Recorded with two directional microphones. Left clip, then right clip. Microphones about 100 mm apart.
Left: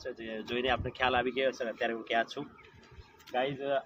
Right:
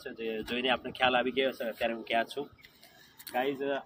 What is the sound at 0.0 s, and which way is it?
Speech, 20° left (ahead or behind).